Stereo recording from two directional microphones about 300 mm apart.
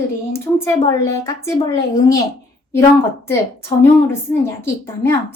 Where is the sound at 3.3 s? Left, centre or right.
Centre.